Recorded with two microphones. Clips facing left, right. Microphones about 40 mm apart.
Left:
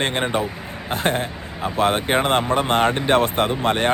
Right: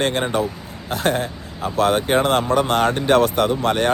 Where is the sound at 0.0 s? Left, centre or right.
Left.